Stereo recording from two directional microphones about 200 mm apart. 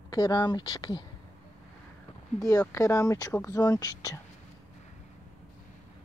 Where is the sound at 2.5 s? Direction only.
15° left (ahead or behind).